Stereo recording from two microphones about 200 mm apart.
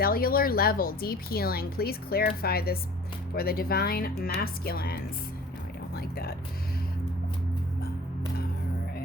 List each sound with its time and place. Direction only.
0.0 s speech: 45° left (ahead or behind)